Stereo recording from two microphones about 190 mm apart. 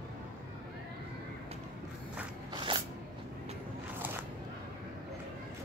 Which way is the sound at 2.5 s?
25° right (ahead or behind).